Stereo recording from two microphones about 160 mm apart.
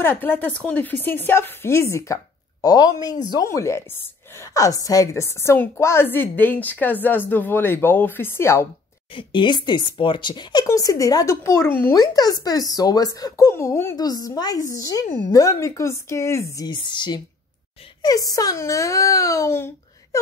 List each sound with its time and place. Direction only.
0.0 s a woman's voice: 10° left (ahead or behind)
9.1 s speech: 30° left (ahead or behind); by 11.9 s 15° left (ahead or behind)
11.9 s speech: 25° left (ahead or behind)